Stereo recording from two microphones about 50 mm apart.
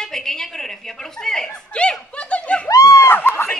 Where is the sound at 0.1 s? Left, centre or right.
Centre.